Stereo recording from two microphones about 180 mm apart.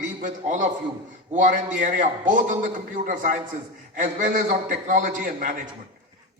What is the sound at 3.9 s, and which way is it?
A man's voice, 45° right (ahead or behind).